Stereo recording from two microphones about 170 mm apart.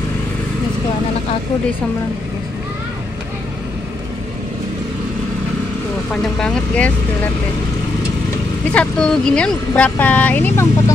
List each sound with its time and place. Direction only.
6.2 s speech: 5° left (ahead or behind)
8.7 s speech: 5° left (ahead or behind)